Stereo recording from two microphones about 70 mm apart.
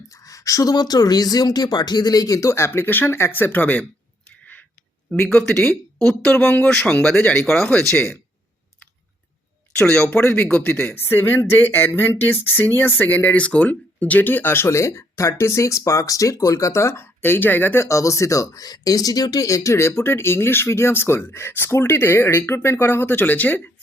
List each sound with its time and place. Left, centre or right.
0.1 s speech: left
2.5 s speech: left
5.1 s speech: centre
9.7 s speech: centre
10.9 s speech: left
17.8 s speech: left